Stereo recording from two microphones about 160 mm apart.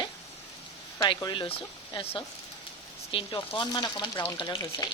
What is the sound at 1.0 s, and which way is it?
Speech, 30° left (ahead or behind).